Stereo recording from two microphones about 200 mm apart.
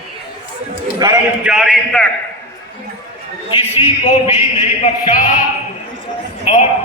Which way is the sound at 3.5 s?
25° left (ahead or behind).